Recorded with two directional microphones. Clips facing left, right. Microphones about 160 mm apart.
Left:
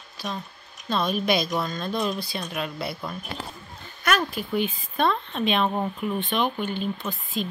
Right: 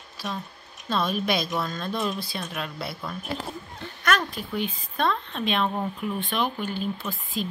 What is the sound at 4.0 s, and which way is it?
Speech, 5° left (ahead or behind).